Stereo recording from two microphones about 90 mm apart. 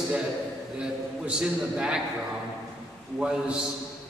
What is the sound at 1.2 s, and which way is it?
Speech, 10° right (ahead or behind).